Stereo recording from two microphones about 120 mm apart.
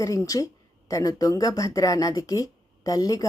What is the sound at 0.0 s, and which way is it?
Speech, 25° left (ahead or behind).